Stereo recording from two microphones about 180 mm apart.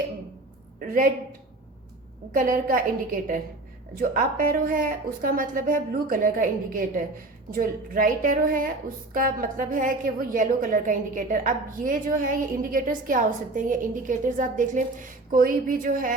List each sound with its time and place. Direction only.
0.8 s a woman's voice: 50° right (ahead or behind)
2.3 s a woman's voice: 50° right (ahead or behind)